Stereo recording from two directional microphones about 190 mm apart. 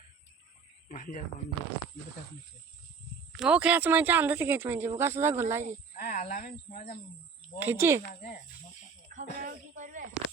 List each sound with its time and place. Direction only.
0.9 s speech: 45° left (ahead or behind)
3.3 s speech: 5° right (ahead or behind)
6.1 s speech: 40° left (ahead or behind)
7.6 s speech: 10° right (ahead or behind)
9.1 s speech: 40° right (ahead or behind)